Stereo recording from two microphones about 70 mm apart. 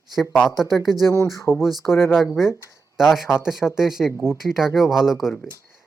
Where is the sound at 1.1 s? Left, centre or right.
Left.